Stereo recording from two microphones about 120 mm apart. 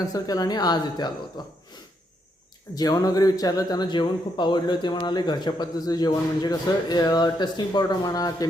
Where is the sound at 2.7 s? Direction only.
30° left (ahead or behind).